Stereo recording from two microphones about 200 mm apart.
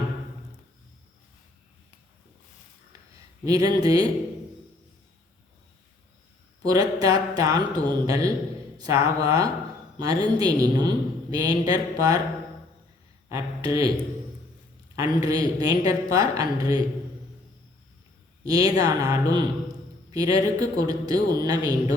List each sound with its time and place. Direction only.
3.4 s a woman's voice: 20° right (ahead or behind)
6.7 s a woman's voice: 20° right (ahead or behind)
13.7 s a woman's voice: 15° right (ahead or behind)
18.4 s a woman's voice: 15° right (ahead or behind)